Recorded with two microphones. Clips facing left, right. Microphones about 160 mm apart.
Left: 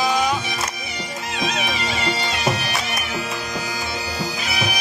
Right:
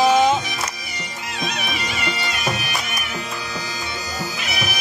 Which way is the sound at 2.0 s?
30° left (ahead or behind).